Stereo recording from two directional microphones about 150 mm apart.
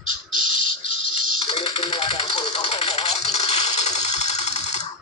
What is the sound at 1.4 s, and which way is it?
Typewriter, 40° left (ahead or behind).